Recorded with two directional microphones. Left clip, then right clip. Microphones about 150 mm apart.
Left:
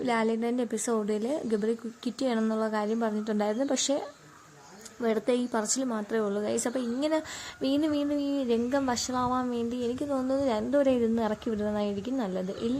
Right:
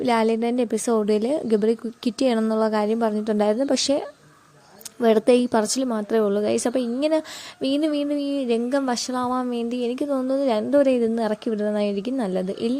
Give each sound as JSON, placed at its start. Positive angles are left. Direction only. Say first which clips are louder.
{"t": 0.0, "sound": "a woman's voice", "louder": "right 7 dB", "side_deg": -40}
{"t": 4.9, "sound": "a woman's voice", "louder": "right 10 dB", "side_deg": -45}